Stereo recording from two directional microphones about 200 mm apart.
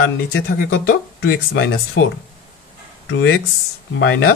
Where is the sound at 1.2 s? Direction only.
60° left (ahead or behind).